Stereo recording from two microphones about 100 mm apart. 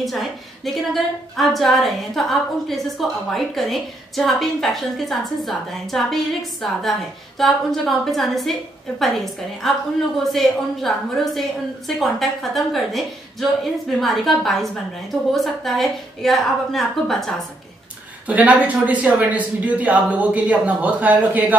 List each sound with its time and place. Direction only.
0.0 s a woman's voice: centre (ahead or behind)
12.0 s a woman's voice: centre (ahead or behind)
18.2 s speech: 15° right (ahead or behind)